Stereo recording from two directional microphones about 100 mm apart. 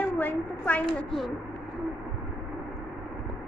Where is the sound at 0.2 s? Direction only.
15° left (ahead or behind).